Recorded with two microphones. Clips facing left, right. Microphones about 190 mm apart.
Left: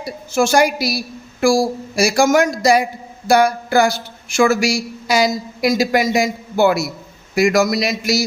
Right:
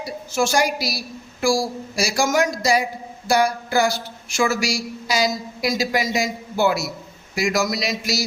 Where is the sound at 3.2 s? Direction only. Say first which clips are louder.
Left 5 dB; 55° left (ahead or behind).